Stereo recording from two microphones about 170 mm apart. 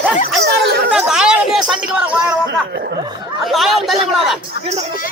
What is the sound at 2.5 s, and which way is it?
Speech, 85° right.